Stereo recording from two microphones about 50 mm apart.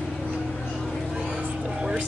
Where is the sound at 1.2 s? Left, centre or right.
Centre.